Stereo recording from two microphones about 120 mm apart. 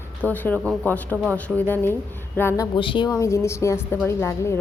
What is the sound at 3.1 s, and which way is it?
Speech, 25° left (ahead or behind).